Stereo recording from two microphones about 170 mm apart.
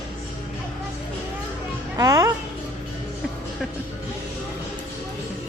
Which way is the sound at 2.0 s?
20° right (ahead or behind).